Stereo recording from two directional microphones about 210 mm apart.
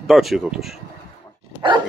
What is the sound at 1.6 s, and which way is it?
Dog, 20° right (ahead or behind).